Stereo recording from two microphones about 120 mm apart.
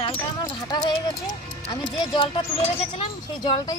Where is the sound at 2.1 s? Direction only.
45° left (ahead or behind).